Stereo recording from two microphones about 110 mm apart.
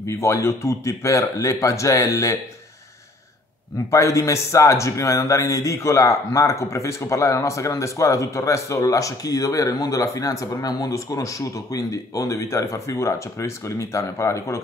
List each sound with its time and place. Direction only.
0.0 s speech: 25° left (ahead or behind)
3.9 s speech: 30° left (ahead or behind)